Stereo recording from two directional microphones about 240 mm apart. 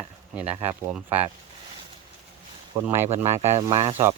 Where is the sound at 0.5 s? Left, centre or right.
Centre.